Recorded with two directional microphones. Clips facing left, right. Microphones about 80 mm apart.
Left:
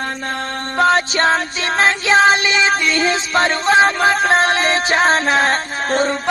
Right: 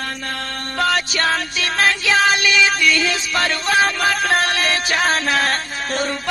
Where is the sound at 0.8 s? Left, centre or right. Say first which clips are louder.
Left 5 dB; left.